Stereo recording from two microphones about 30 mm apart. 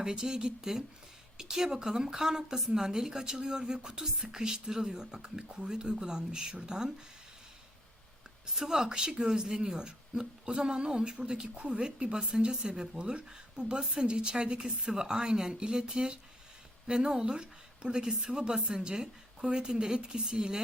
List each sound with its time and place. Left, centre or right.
0.0 s a woman's voice: right
8.4 s speech: centre
11.5 s speech: right